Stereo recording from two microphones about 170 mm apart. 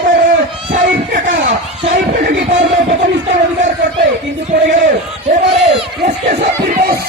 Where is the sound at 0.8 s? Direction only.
50° right (ahead or behind).